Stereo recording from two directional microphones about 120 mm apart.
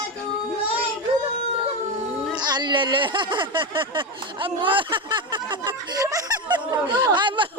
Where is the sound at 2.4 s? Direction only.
35° right (ahead or behind).